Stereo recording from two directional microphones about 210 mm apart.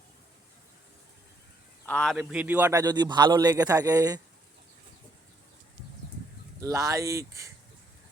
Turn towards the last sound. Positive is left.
turn(degrees=-15)  # may be behind; listen again after turning